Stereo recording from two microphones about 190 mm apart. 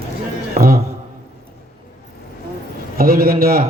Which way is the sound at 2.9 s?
50° right (ahead or behind).